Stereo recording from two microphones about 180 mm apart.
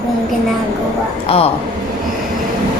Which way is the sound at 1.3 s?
30° left (ahead or behind).